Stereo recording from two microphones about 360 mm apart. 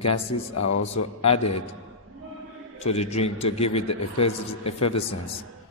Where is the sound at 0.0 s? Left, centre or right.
Left.